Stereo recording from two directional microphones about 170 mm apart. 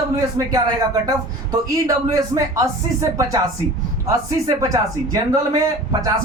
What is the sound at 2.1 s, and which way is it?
Speech, 20° right (ahead or behind).